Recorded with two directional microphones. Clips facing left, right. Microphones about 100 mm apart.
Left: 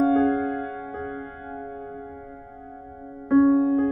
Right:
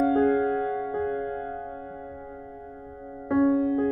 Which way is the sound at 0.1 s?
25° left (ahead or behind).